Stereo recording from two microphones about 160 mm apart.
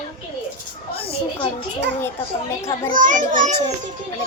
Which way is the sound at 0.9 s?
35° left (ahead or behind).